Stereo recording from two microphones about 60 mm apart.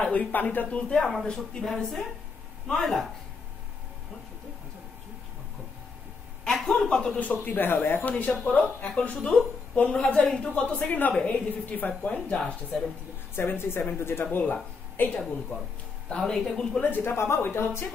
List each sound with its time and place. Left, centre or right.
0.0 s a woman's voice: left
0.7 s speech: centre
6.4 s a man's voice: centre
7.2 s a woman's voice: left
10.9 s a woman's voice: left
13.4 s speech: left
14.4 s speech: left
16.3 s speech: centre
16.8 s speech: left